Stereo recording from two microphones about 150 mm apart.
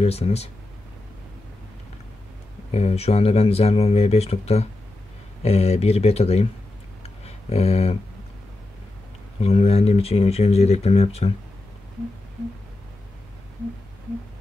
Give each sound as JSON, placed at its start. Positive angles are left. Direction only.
{"t": 0.0, "sound": "speech", "side_deg": 45}
{"t": 2.7, "sound": "speech", "side_deg": 45}
{"t": 7.0, "sound": "a sound", "side_deg": 45}
{"t": 9.4, "sound": "speech", "side_deg": 45}